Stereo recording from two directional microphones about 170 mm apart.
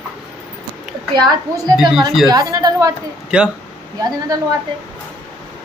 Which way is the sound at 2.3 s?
20° right (ahead or behind).